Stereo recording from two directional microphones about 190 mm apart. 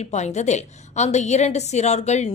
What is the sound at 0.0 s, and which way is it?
A woman's voice, 35° left (ahead or behind).